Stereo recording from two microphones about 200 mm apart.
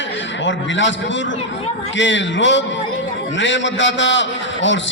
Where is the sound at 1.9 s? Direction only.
65° left (ahead or behind).